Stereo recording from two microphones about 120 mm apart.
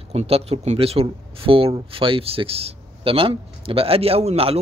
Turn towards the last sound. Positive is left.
turn(degrees=-55)  # may be behind; listen again after turning